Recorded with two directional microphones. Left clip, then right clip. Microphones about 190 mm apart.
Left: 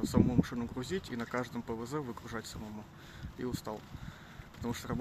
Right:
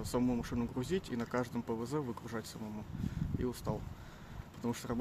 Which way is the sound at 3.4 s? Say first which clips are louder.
Left 1 dB; centre (ahead or behind).